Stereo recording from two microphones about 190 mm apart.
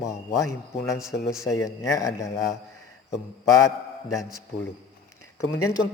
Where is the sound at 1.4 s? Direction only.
15° left (ahead or behind).